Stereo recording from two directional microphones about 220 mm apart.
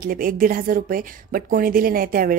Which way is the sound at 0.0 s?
40° right (ahead or behind).